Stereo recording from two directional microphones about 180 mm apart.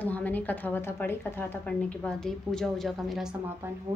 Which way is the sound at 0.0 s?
10° left (ahead or behind).